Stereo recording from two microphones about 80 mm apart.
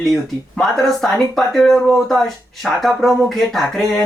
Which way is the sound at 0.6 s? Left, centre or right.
Centre.